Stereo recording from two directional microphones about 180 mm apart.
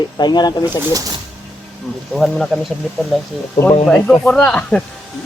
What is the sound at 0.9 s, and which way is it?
Speech, 20° right (ahead or behind).